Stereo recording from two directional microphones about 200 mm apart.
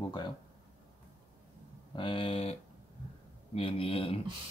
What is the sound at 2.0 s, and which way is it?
Speech, 25° left (ahead or behind).